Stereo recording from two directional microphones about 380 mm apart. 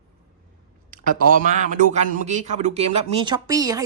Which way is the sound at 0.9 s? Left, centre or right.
Right.